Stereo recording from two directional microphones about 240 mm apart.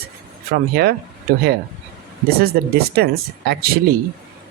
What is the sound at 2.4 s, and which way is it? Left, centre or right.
Speech, right.